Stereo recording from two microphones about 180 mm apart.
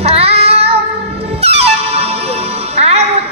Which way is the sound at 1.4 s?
35° right (ahead or behind).